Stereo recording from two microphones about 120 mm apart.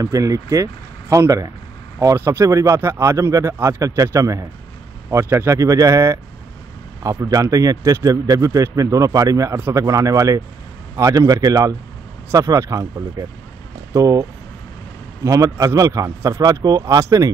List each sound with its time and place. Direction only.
0.0 s a man's voice: 30° right (ahead or behind)
15.2 s a man's voice: 25° right (ahead or behind)